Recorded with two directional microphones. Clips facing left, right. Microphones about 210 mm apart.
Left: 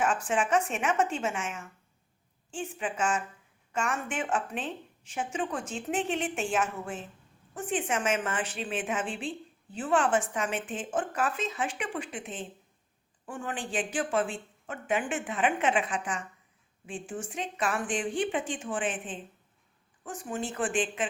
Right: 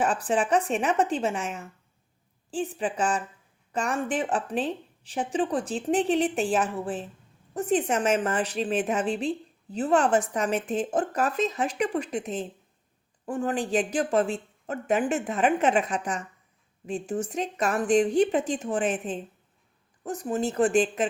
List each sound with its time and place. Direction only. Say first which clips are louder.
0.0 s a woman's voice: right 3 dB; 35° right (ahead or behind)